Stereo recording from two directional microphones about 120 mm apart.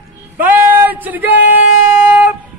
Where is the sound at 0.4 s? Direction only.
15° right (ahead or behind).